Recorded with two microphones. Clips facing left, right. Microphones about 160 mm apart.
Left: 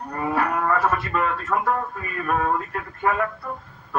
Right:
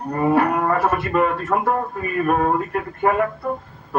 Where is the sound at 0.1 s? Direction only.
25° right (ahead or behind).